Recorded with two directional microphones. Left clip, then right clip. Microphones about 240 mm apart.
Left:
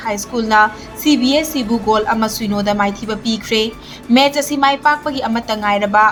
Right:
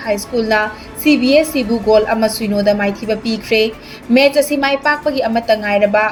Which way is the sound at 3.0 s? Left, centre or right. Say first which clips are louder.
Right 2 dB; centre.